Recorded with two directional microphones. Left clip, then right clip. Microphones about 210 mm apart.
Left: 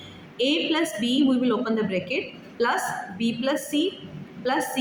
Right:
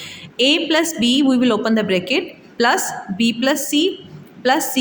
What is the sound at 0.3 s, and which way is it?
A woman's voice, 50° right (ahead or behind).